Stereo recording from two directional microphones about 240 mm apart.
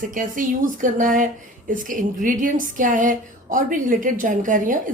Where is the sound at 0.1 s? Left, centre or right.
Right.